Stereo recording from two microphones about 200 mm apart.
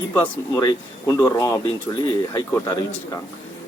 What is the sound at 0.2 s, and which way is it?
Speech, 15° left (ahead or behind).